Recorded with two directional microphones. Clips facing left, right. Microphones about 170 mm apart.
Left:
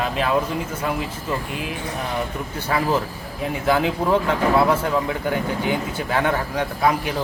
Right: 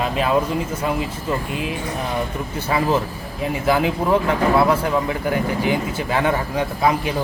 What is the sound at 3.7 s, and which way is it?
Speech, 5° right (ahead or behind).